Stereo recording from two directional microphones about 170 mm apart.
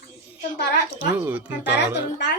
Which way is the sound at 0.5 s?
90° left.